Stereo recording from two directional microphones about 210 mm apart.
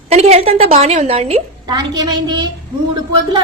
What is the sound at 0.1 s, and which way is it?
A woman's voice, 30° right (ahead or behind).